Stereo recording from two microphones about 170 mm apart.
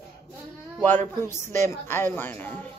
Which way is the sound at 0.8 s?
10° left (ahead or behind).